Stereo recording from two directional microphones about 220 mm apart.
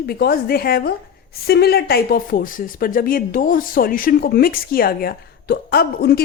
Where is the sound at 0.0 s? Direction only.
45° left (ahead or behind).